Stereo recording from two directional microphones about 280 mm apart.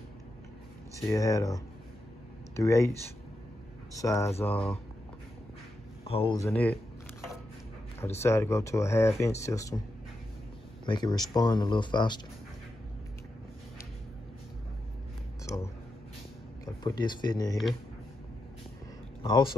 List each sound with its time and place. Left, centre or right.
1.0 s speech: centre
3.9 s speech: centre
6.0 s speech: centre
8.0 s speech: centre
10.9 s speech: centre
15.4 s a sound: centre
16.6 s speech: centre
19.2 s speech: centre